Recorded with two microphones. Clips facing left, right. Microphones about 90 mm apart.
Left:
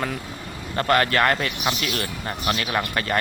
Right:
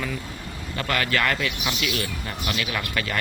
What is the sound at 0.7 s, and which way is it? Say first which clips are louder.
Speech: left 5 dB; 40° left (ahead or behind).